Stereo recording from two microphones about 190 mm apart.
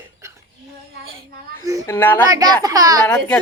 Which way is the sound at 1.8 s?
10° left (ahead or behind).